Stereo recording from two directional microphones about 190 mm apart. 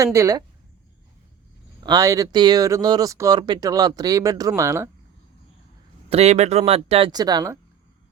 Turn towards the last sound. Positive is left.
turn(degrees=-20)  # may be behind; listen again after turning